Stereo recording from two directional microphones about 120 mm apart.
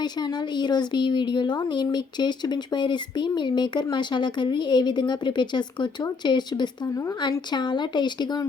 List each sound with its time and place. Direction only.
0.0 s a woman's voice: 35° left (ahead or behind)